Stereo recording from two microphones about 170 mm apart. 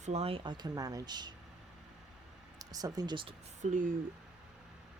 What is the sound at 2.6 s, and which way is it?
Speech, 20° right (ahead or behind).